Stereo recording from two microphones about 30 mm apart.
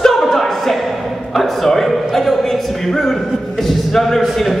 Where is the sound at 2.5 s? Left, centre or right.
Centre.